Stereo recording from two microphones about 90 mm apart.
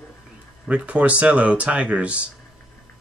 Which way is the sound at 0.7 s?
15° right (ahead or behind).